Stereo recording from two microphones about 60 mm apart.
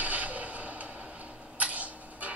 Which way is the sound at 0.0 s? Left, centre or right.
Right.